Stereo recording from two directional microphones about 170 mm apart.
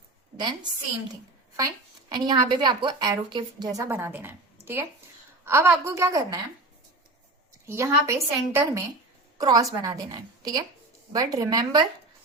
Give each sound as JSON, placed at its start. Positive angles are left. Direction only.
{"t": 0.3, "sound": "a woman's voice", "side_deg": -25}
{"t": 7.7, "sound": "a woman's voice", "side_deg": -15}